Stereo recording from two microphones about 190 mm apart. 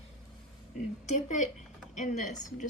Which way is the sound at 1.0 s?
40° left (ahead or behind).